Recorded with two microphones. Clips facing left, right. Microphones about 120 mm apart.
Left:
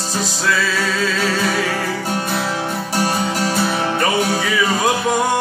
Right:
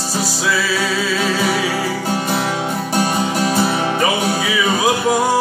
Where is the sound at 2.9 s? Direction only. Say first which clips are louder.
Right 1 dB; 20° right (ahead or behind).